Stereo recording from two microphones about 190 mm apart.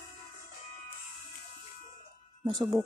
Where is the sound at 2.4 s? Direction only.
25° right (ahead or behind).